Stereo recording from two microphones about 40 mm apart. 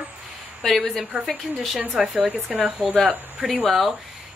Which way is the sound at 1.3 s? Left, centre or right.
Centre.